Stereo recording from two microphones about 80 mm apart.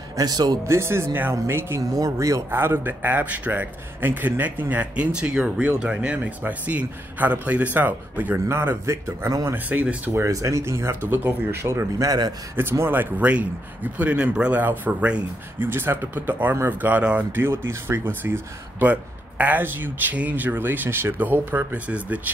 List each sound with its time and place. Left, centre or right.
0.2 s a man's voice: right
0.7 s speech: right
1.8 s speech: right
2.5 s speech: right
9.7 s speech: centre
10.2 s speech: right
12.0 s speech: right
12.5 s speech: right
17.4 s speech: right